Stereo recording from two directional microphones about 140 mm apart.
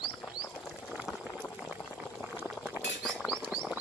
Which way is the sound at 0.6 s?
5° right (ahead or behind).